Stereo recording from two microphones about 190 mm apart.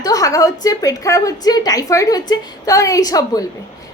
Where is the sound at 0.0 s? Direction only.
20° left (ahead or behind).